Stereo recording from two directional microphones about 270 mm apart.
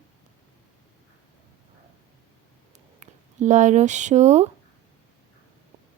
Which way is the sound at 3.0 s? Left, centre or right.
Right.